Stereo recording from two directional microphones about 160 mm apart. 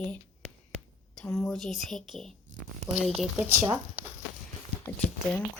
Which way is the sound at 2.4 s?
50° right (ahead or behind).